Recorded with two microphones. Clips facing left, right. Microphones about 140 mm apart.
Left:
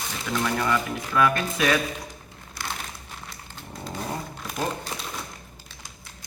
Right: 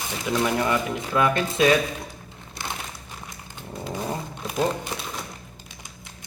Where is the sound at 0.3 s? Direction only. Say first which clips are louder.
Right 2 dB; 20° right (ahead or behind).